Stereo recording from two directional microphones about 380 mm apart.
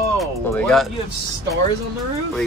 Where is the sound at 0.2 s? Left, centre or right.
Centre.